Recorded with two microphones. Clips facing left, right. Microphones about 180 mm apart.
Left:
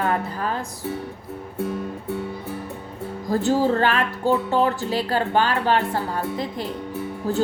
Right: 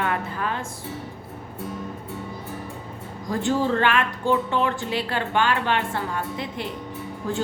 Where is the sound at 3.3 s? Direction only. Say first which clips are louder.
Left 3 dB; 40° left (ahead or behind).